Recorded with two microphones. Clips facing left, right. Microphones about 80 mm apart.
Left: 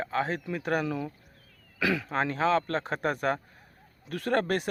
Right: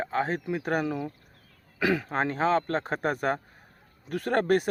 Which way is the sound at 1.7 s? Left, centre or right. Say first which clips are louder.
Right 2 dB; right.